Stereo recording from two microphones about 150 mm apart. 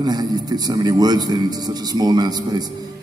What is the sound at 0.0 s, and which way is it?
A man's voice, 25° right (ahead or behind).